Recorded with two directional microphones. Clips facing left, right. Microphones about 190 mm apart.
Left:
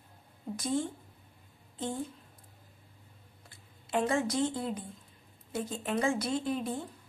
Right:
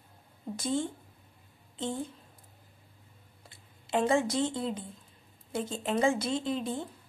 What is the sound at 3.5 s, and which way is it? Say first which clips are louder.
Speech: right 3 dB; 25° right (ahead or behind).